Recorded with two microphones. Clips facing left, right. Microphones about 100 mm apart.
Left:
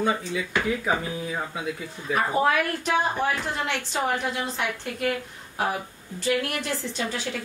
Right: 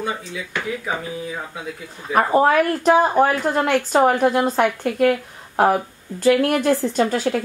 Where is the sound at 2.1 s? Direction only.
45° right (ahead or behind).